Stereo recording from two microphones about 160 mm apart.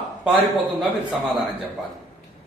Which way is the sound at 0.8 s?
Centre (ahead or behind).